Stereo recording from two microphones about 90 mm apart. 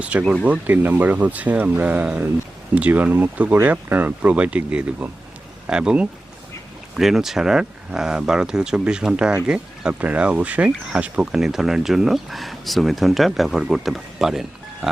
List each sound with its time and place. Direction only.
0.1 s speech: 15° right (ahead or behind)